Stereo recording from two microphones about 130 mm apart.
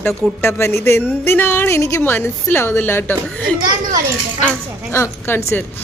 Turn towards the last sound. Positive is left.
turn(degrees=20)  # may be behind; listen again after turning